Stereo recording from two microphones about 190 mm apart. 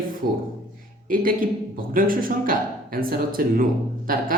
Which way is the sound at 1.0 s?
45° right (ahead or behind).